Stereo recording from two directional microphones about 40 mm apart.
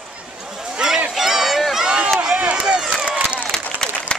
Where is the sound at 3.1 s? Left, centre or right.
Right.